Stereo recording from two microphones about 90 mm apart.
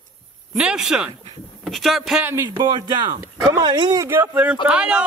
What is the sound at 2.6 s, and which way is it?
Speech, 55° right (ahead or behind).